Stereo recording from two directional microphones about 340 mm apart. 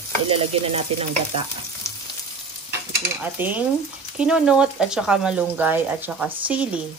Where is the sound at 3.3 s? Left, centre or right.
Centre.